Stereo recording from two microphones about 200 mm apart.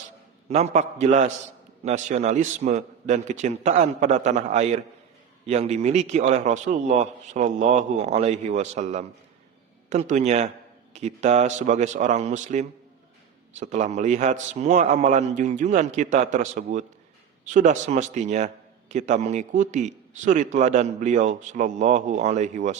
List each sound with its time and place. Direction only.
0.4 s a man's voice: 35° right (ahead or behind)